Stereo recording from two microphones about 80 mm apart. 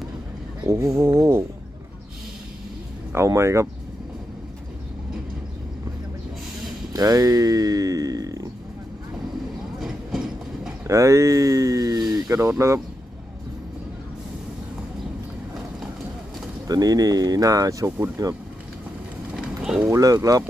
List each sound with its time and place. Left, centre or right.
0.9 s a sound: right
3.1 s speech: right
6.9 s speech: right
9.8 s train: centre
10.9 s speech: right
16.6 s speech: right
19.3 s run: centre
19.9 s speech: right